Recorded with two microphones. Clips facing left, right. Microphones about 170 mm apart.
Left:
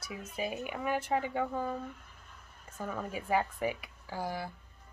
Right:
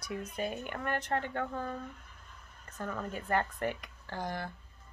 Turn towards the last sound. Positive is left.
turn(degrees=5)  # may be behind; listen again after turning